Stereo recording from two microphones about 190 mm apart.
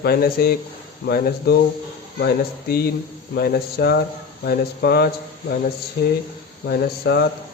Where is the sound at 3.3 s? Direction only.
55° left (ahead or behind).